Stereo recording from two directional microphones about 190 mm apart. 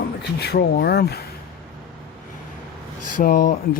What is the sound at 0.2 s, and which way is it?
Speech, 60° left (ahead or behind).